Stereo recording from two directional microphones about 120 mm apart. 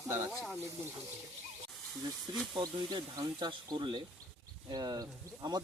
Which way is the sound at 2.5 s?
40° right (ahead or behind).